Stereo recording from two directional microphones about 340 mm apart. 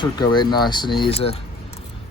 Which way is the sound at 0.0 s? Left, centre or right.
Centre.